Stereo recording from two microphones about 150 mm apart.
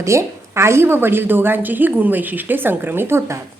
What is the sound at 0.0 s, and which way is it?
A woman's voice, 20° right (ahead or behind).